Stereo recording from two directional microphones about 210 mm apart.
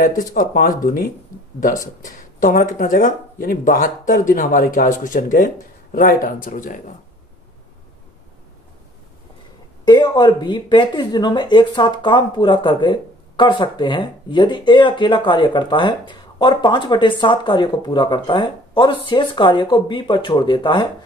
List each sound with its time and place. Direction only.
0.2 s speech: 40° left (ahead or behind)
9.8 s speech: 20° left (ahead or behind)